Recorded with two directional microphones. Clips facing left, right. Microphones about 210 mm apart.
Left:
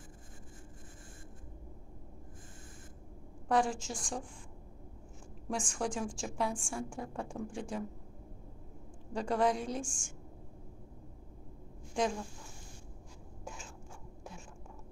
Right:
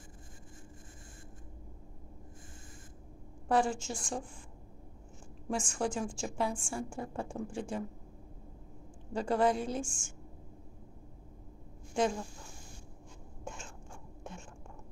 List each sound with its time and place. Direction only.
3.4 s a woman's voice: centre (ahead or behind)
5.5 s a woman's voice: centre (ahead or behind)
9.1 s a woman's voice: centre (ahead or behind)
12.0 s a woman's voice: centre (ahead or behind)
13.4 s a sound: centre (ahead or behind)